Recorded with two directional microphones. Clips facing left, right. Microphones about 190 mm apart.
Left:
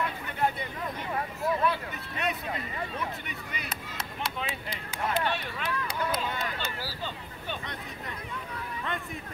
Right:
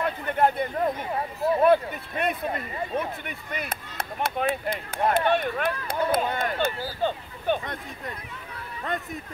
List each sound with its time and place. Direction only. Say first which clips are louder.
0.0 s a sound: right 6 dB; 50° right (ahead or behind)
1.1 s speech: right 4 dB; 30° right (ahead or behind)
1.6 s speech: right 10 dB; 55° right (ahead or behind)